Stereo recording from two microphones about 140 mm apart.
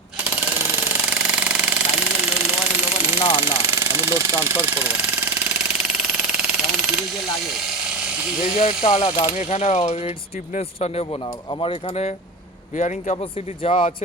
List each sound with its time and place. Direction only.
1.1 s jackhammer: 10° right (ahead or behind)
3.2 s a sound: 45° left (ahead or behind)
3.4 s speech: 15° right (ahead or behind)
5.7 s jackhammer: 5° right (ahead or behind)
8.5 s mechanisms: 45° left (ahead or behind)
9.3 s coin: 60° left (ahead or behind)
10.6 s mechanisms: 50° left (ahead or behind)
12.7 s coin: 60° left (ahead or behind)
13.6 s speech: 40° left (ahead or behind)